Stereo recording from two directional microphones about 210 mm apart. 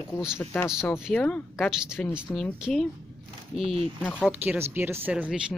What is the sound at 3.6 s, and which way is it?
Speech, 25° right (ahead or behind).